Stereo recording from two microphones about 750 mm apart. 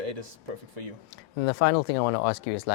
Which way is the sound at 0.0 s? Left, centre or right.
Right.